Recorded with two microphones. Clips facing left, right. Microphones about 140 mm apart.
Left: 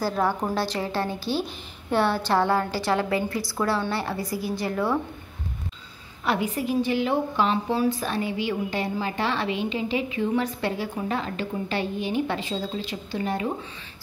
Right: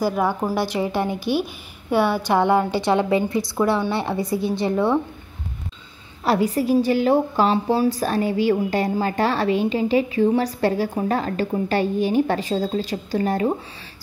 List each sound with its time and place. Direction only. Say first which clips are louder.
0.0 s a woman's voice: right 3 dB; 15° right (ahead or behind)
6.2 s a woman's voice: right 6 dB; 35° right (ahead or behind)